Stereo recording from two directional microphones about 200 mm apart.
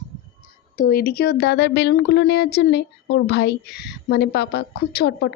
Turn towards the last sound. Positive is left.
turn(degrees=55)  # may be behind; listen again after turning